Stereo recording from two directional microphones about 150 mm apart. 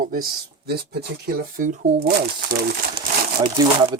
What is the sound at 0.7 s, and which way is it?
Speech, 90° right.